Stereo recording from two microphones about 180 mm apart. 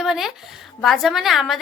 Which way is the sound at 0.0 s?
Centre (ahead or behind).